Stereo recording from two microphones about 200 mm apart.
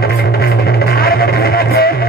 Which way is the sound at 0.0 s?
50° left (ahead or behind).